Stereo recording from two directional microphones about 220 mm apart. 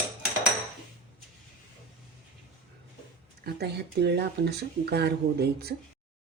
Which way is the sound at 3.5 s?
50° right (ahead or behind).